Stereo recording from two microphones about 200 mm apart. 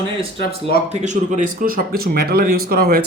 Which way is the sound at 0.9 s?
35° right (ahead or behind).